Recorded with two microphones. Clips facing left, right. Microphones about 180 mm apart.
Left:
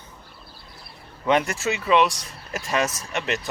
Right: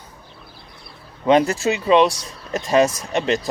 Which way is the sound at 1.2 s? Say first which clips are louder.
Right 6 dB; 30° right (ahead or behind).